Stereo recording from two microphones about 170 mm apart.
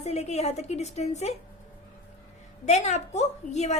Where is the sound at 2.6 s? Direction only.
40° left (ahead or behind).